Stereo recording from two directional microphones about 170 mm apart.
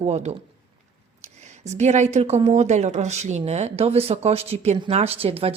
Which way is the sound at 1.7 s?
45° right (ahead or behind).